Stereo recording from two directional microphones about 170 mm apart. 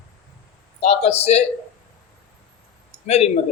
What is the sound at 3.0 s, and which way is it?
Speech, 40° left (ahead or behind).